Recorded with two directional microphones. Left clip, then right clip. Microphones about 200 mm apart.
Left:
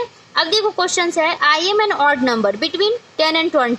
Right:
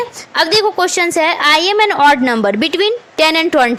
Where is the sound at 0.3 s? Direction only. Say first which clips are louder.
Right 4 dB; 40° right (ahead or behind).